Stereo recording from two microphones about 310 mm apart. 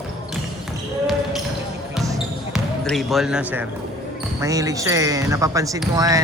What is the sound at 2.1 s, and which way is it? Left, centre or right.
Basketball bounce, centre.